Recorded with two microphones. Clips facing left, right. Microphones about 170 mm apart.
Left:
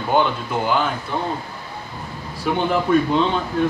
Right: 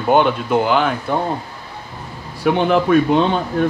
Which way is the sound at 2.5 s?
65° right (ahead or behind).